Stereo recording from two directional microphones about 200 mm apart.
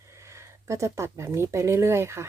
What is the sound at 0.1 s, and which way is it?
Speech, 15° right (ahead or behind).